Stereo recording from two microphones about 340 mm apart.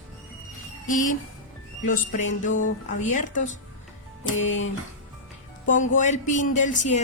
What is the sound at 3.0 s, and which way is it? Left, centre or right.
Speech, left.